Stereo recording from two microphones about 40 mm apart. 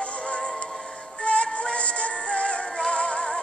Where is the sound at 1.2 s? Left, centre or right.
Left.